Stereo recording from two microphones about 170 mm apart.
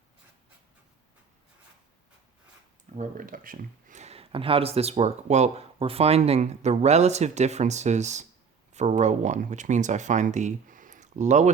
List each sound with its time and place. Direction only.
2.9 s speech: 50° right (ahead or behind)